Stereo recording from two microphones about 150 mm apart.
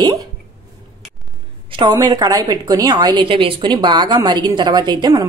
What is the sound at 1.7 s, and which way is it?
A woman's voice, 30° right (ahead or behind).